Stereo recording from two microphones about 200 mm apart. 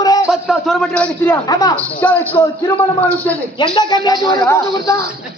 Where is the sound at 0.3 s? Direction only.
Centre (ahead or behind); by 1.7 s 20° left (ahead or behind).